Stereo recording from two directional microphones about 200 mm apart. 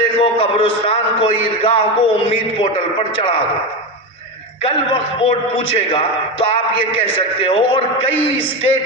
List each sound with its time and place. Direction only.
0.2 s a man's voice: 25° left (ahead or behind)
5.2 s a man's voice: 25° left (ahead or behind)